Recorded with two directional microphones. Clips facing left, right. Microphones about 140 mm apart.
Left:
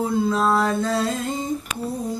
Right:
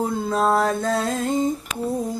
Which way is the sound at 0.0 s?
45° right (ahead or behind).